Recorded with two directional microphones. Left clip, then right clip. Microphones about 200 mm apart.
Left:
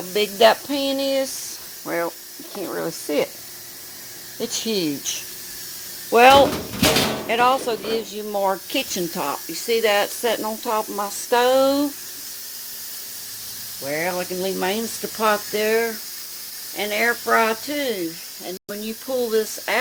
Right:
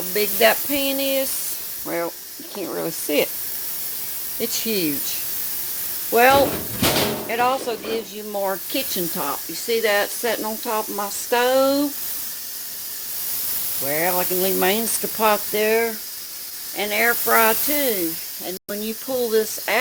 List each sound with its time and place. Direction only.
0.1 s speech: 10° left (ahead or behind)
1.9 s speech: 5° right (ahead or behind)
4.4 s speech: centre (ahead or behind)
6.1 s speech: 10° left (ahead or behind)
13.8 s speech: 20° right (ahead or behind)
15.2 s speech: 10° right (ahead or behind)
16.7 s speech: 20° right (ahead or behind)
19.0 s speech: 5° right (ahead or behind)